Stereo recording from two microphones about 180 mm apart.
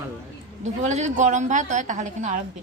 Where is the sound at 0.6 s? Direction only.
40° right (ahead or behind).